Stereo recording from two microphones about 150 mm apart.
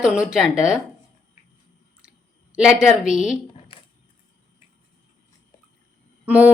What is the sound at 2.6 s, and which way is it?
Speech, 5° right (ahead or behind).